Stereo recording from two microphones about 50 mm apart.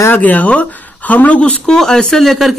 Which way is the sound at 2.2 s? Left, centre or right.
Centre.